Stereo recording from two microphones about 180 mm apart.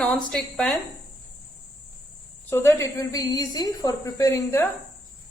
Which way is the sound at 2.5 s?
15° left (ahead or behind).